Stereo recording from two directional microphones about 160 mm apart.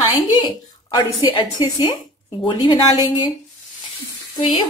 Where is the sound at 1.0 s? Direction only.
30° left (ahead or behind).